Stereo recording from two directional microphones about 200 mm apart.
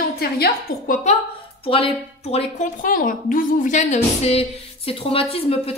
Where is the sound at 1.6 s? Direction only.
30° left (ahead or behind).